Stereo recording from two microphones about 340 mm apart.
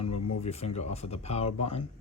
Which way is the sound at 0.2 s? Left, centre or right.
Left.